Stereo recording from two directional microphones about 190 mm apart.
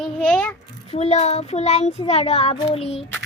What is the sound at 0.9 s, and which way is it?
Child singing, 35° left (ahead or behind).